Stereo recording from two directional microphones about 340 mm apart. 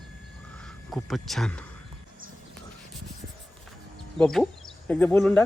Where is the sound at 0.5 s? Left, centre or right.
Centre.